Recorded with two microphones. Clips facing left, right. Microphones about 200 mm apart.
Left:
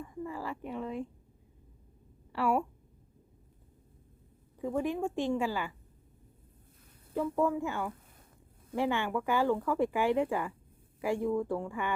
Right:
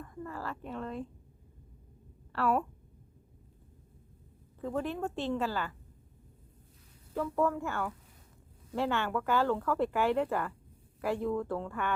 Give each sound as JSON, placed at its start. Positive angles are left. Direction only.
{"t": 0.0, "sound": "a woman's voice", "side_deg": 10}
{"t": 2.3, "sound": "speech", "side_deg": 15}
{"t": 4.6, "sound": "speech", "side_deg": 15}
{"t": 7.1, "sound": "speech", "side_deg": 15}